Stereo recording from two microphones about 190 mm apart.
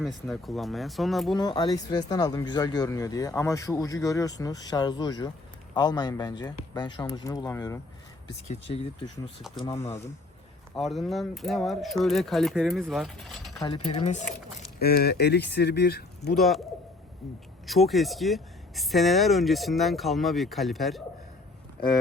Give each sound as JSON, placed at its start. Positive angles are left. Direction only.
{"t": 0.0, "sound": "speech", "side_deg": 0}
{"t": 1.4, "sound": "speech", "side_deg": 20}
{"t": 8.4, "sound": "speech", "side_deg": 30}
{"t": 9.6, "sound": "speech", "side_deg": 15}
{"t": 10.8, "sound": "speech", "side_deg": 0}
{"t": 13.6, "sound": "speech", "side_deg": 25}
{"t": 14.8, "sound": "speech", "side_deg": 55}
{"t": 16.3, "sound": "speech", "side_deg": 0}
{"t": 17.7, "sound": "speech", "side_deg": 0}